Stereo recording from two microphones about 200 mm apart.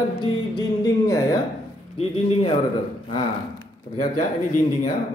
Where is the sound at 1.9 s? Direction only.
30° left (ahead or behind).